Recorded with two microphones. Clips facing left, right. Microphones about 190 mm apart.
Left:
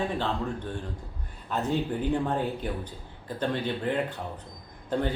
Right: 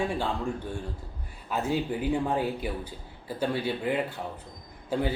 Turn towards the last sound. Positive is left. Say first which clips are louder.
# even
turn(degrees=-10)  # may be behind; listen again after turning